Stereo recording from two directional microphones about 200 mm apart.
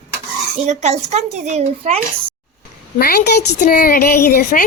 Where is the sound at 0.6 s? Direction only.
35° right (ahead or behind).